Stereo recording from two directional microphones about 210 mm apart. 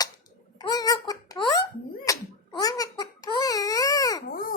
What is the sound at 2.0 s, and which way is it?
Crying, 15° left (ahead or behind).